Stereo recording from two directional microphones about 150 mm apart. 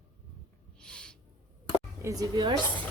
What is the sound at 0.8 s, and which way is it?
Owl, 5° left (ahead or behind).